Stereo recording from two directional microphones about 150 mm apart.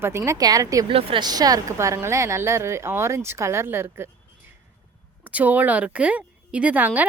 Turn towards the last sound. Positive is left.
turn(degrees=-10)  # may be behind; listen again after turning